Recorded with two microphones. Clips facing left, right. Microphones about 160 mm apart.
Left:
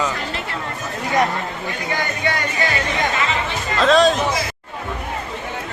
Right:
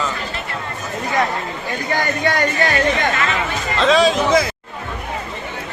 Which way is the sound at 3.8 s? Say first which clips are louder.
Even; centre (ahead or behind).